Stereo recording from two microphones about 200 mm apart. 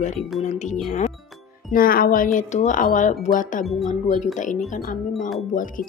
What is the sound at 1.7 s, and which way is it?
Speech, 45° left (ahead or behind).